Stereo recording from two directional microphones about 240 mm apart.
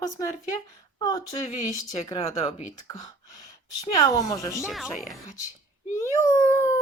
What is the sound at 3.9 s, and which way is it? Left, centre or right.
Speech, centre.